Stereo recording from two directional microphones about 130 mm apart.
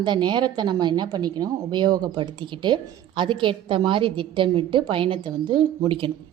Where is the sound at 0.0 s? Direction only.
35° right (ahead or behind).